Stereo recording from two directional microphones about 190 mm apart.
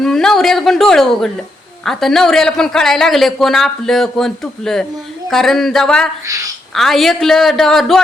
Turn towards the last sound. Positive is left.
turn(degrees=0)  # may be behind; listen again after turning